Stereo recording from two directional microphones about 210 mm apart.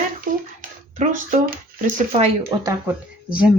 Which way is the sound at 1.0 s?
35° right (ahead or behind).